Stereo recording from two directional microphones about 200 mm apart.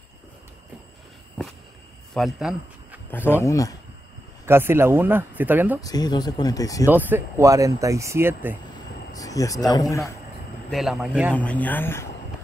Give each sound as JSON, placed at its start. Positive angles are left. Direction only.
{"t": 2.1, "sound": "speech", "side_deg": 0}
{"t": 3.1, "sound": "a man's voice", "side_deg": 10}
{"t": 4.5, "sound": "speech", "side_deg": -10}
{"t": 5.8, "sound": "speech", "side_deg": 20}
{"t": 6.9, "sound": "speech", "side_deg": -10}
{"t": 9.1, "sound": "a man's voice", "side_deg": 15}
{"t": 10.7, "sound": "speech", "side_deg": 0}
{"t": 11.3, "sound": "a man's voice", "side_deg": 5}